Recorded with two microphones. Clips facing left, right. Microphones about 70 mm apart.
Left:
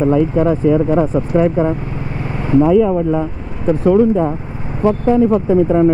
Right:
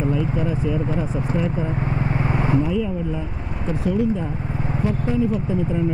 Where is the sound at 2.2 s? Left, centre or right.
Centre.